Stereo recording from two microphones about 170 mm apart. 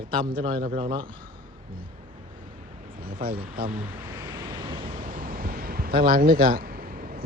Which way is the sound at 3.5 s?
60° right (ahead or behind).